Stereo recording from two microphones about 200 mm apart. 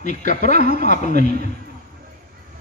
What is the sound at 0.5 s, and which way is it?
Speech, 50° right (ahead or behind).